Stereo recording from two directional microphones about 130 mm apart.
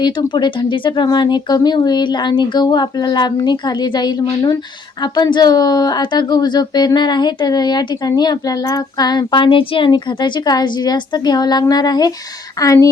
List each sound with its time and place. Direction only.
0.0 s speech: 35° left (ahead or behind)